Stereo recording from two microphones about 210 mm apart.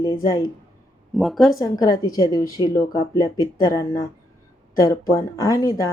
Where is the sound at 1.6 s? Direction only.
20° left (ahead or behind).